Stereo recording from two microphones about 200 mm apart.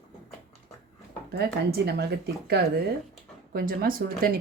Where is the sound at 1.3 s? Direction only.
55° right (ahead or behind).